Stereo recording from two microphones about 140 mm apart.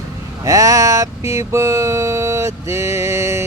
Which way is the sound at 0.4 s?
25° right (ahead or behind).